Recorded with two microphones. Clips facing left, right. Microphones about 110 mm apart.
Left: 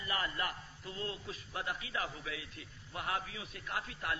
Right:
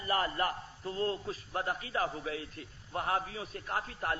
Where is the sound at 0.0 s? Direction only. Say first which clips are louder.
Right 6 dB; 40° right (ahead or behind).